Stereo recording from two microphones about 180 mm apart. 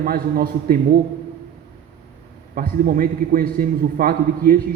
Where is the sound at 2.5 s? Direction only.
50° right (ahead or behind).